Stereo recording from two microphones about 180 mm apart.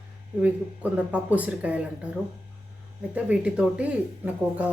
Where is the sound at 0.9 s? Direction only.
10° right (ahead or behind).